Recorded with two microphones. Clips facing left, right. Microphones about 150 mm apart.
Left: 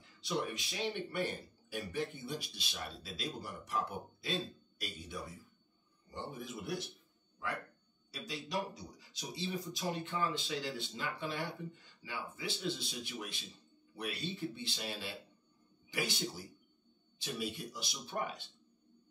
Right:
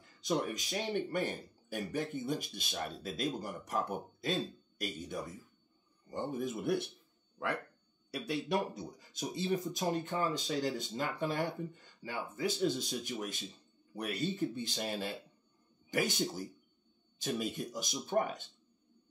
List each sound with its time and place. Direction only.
0.0 s speech: 45° right (ahead or behind)
8.1 s speech: 60° right (ahead or behind)